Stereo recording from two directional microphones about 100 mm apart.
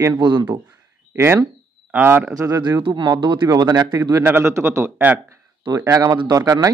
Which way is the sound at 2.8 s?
55° right (ahead or behind).